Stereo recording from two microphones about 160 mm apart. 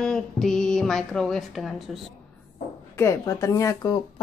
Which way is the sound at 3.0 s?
20° left (ahead or behind).